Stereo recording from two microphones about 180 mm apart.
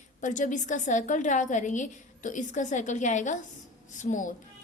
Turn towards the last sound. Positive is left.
turn(degrees=45)  # may be behind; listen again after turning